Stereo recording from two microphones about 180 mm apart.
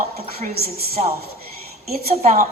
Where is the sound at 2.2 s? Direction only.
45° right (ahead or behind).